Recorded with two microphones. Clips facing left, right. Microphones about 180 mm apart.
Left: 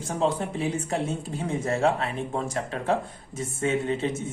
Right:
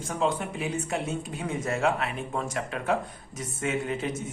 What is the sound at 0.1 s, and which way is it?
Speech, 30° left (ahead or behind).